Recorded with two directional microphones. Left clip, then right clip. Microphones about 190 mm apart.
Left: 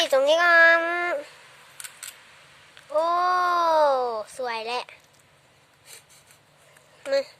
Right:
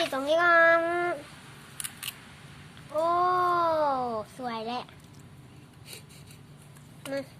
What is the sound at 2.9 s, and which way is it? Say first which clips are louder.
Baby cry: left 3 dB; 50° left (ahead or behind).